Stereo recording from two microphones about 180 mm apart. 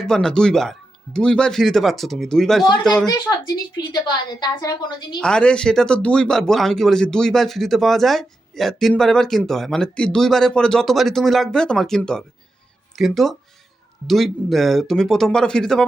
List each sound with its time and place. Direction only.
0.0 s speech: 5° left (ahead or behind)
4.3 s a woman's voice: 25° left (ahead or behind)
5.2 s speech: 5° left (ahead or behind)